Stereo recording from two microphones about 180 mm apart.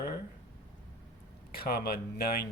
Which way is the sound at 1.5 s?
60° left (ahead or behind).